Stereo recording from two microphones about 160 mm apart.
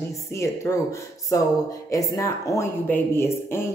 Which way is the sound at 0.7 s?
15° left (ahead or behind).